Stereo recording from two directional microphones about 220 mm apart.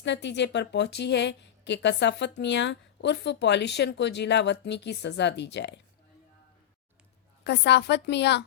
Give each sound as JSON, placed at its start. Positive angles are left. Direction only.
{"t": 0.0, "sound": "a woman's voice", "side_deg": 50}
{"t": 7.4, "sound": "a woman's voice", "side_deg": 50}